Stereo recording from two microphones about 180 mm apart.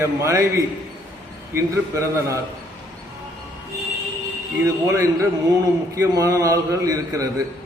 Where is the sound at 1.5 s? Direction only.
15° right (ahead or behind).